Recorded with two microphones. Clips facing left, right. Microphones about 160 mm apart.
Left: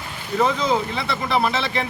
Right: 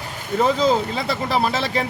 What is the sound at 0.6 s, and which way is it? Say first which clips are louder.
Speech: right 3 dB; 35° right (ahead or behind).